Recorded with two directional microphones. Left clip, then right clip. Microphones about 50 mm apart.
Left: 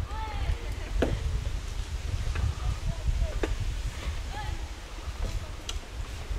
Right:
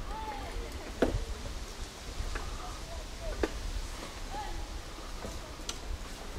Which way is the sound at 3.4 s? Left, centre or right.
Centre.